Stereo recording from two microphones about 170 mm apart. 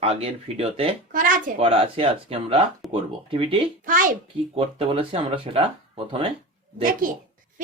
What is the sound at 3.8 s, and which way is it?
Speech, 50° right (ahead or behind).